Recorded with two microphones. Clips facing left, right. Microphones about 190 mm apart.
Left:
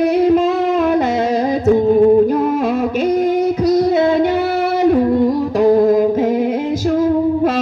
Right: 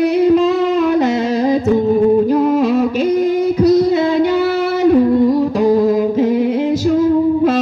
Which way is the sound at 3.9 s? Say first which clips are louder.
Even; 50° left (ahead or behind).